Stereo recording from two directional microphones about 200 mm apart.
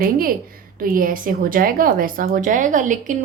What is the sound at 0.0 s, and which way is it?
Speech, 45° right (ahead or behind).